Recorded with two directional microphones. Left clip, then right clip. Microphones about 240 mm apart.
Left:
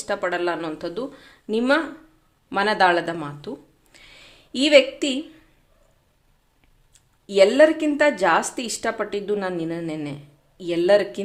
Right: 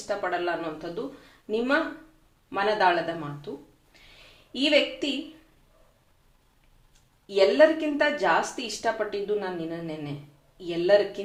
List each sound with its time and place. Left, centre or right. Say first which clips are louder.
0.1 s a woman's voice: left 4 dB; left
4.5 s a woman's voice: left 7 dB; left
7.3 s a woman's voice: left 4 dB; left